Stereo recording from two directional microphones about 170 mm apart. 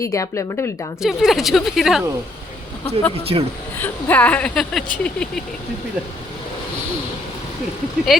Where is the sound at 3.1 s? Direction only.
35° right (ahead or behind).